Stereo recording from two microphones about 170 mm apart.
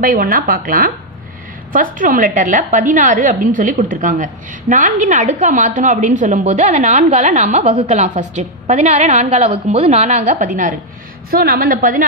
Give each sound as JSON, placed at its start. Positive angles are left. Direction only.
{"t": 0.0, "sound": "a woman's voice", "side_deg": -55}
{"t": 11.2, "sound": "a woman's voice", "side_deg": -60}